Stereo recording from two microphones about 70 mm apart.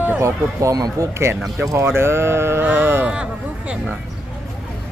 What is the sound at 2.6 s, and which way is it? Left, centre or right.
Speech, right.